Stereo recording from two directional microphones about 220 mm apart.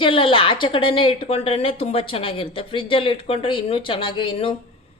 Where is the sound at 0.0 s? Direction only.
25° left (ahead or behind).